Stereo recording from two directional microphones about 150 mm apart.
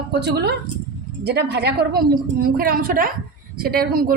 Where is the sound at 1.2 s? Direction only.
90° right; by 3.1 s 75° right (ahead or behind).